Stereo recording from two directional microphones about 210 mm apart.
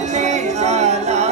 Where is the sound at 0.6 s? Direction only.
30° right (ahead or behind).